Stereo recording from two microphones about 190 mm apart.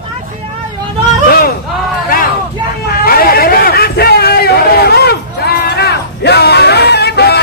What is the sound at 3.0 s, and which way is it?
Hubbub, 50° left (ahead or behind).